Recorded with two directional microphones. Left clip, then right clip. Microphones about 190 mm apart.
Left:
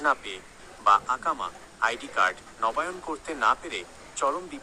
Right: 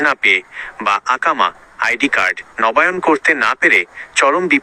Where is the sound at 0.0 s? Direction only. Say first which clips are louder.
Right 14 dB; 45° right (ahead or behind).